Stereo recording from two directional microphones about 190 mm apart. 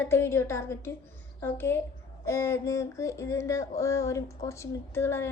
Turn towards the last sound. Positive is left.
turn(degrees=15)  # may be behind; listen again after turning